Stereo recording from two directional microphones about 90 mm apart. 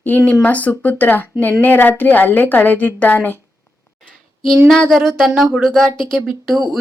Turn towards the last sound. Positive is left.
turn(degrees=0)  # may be behind; listen again after turning